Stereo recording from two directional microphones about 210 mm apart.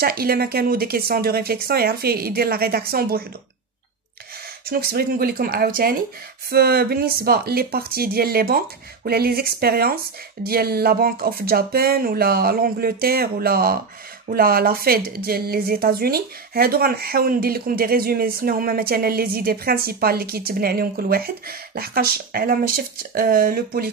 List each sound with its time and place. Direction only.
0.0 s speech: 45° right (ahead or behind)
4.6 s speech: 45° right (ahead or behind)